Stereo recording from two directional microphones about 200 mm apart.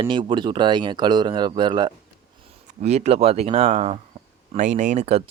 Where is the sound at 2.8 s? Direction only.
35° right (ahead or behind).